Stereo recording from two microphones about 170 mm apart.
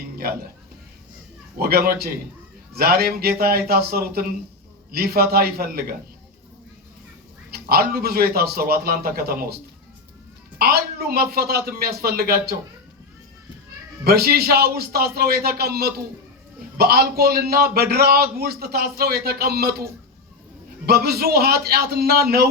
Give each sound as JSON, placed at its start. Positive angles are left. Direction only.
{"t": 0.2, "sound": "a man's voice", "side_deg": -65}
{"t": 1.5, "sound": "a man's voice", "side_deg": -65}
{"t": 7.5, "sound": "a man's voice", "side_deg": -65}
{"t": 10.6, "sound": "a man's voice", "side_deg": -65}
{"t": 14.0, "sound": "a man's voice", "side_deg": -65}